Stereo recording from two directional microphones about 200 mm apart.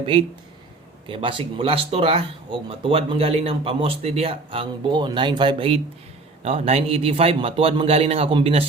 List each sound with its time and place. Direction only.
0.0 s speech: 25° right (ahead or behind)